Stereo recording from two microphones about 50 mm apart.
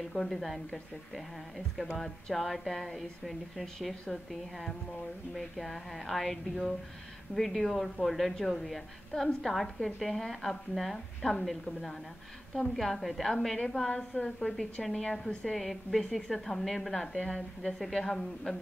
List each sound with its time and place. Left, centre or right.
0.1 s speech: centre
1.8 s a woman's voice: centre
13.8 s a woman's voice: centre